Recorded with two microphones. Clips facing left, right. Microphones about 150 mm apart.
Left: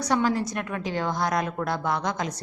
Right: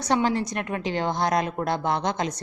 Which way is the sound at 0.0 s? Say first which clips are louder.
Right 1 dB; 25° right (ahead or behind).